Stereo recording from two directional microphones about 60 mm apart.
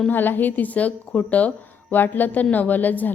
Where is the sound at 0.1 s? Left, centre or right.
Left.